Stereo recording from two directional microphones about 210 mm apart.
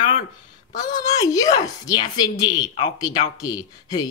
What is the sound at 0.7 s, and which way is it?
A woman's voice, 15° left (ahead or behind).